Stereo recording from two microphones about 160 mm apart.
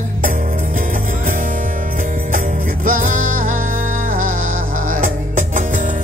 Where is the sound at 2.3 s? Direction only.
55° right (ahead or behind).